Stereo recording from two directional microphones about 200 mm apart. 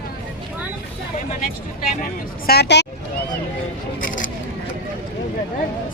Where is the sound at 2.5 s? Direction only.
55° left (ahead or behind).